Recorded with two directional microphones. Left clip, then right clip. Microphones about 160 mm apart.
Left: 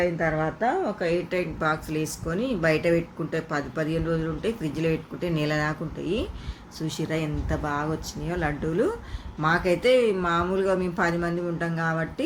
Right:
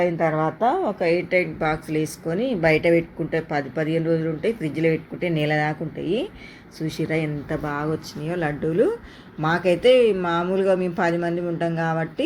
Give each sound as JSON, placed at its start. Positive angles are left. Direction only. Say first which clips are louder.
{"t": 0.2, "sound": "a woman's voice", "louder": "right 4 dB", "side_deg": -30}
{"t": 1.0, "sound": "speech", "louder": "right 6 dB", "side_deg": -10}